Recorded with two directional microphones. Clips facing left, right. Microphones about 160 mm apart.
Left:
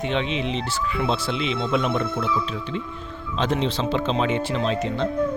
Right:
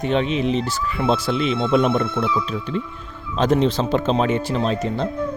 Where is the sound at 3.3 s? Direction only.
45° right (ahead or behind).